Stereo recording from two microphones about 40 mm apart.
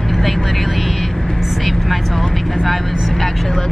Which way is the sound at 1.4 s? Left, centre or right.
Centre.